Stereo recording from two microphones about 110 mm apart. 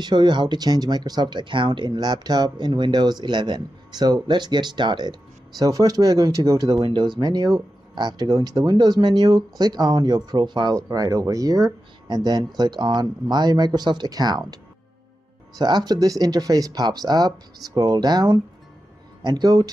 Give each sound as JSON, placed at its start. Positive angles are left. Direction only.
{"t": 0.0, "sound": "speech", "side_deg": -40}
{"t": 6.8, "sound": "speech", "side_deg": -45}
{"t": 15.6, "sound": "speech", "side_deg": -40}